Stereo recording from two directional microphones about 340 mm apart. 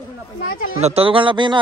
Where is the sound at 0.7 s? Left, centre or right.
Centre.